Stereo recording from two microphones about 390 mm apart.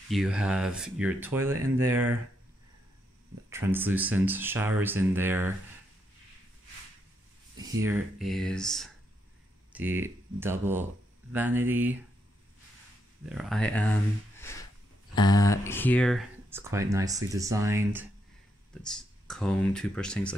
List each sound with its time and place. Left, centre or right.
0.1 s speech: centre
3.4 s speech: centre
7.5 s speech: centre
13.2 s speech: centre
14.3 s a sound: centre
15.1 s speech: centre